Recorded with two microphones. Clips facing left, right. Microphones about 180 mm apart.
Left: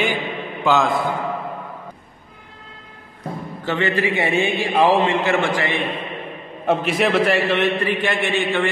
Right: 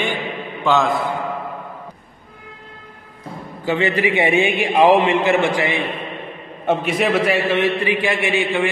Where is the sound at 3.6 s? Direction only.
15° right (ahead or behind).